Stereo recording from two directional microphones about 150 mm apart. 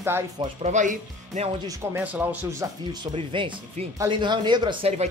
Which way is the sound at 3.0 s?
35° right (ahead or behind).